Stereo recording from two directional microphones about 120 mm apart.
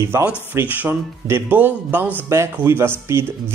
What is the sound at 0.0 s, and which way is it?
Speech, 15° right (ahead or behind).